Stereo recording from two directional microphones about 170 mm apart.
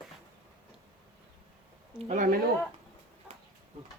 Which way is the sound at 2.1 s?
55° right (ahead or behind).